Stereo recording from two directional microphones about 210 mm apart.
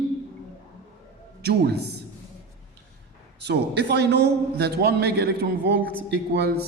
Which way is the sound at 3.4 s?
50° right (ahead or behind).